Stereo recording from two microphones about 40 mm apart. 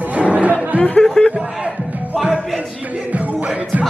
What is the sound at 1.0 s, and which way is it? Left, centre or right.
Speech, centre.